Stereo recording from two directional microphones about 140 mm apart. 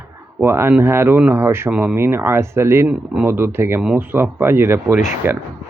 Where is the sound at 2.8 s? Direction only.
5° right (ahead or behind).